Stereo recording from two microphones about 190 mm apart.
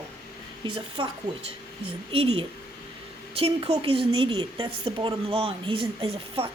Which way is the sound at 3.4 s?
30° right (ahead or behind).